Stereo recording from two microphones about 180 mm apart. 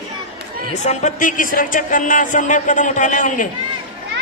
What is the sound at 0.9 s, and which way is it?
A woman's voice, 45° left (ahead or behind).